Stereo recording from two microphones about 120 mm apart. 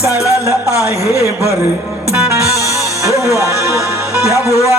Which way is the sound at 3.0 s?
25° right (ahead or behind).